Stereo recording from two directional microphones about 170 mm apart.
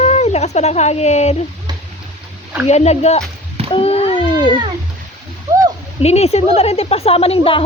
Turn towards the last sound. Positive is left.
turn(degrees=35)  # may be behind; listen again after turning